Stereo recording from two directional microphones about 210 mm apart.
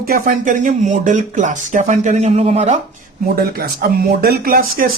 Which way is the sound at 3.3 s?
45° right (ahead or behind).